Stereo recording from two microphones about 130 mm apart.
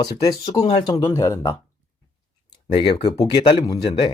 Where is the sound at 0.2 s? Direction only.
25° left (ahead or behind).